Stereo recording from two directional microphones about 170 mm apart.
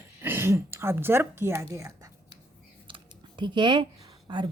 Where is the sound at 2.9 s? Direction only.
25° right (ahead or behind).